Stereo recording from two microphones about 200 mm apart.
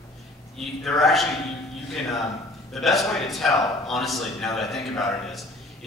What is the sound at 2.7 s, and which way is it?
A man's voice, centre (ahead or behind).